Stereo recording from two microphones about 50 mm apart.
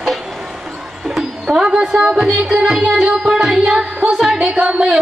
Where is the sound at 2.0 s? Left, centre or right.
Centre.